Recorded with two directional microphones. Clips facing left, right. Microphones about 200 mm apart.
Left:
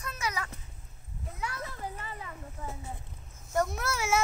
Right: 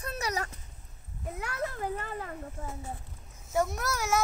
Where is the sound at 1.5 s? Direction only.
55° right (ahead or behind).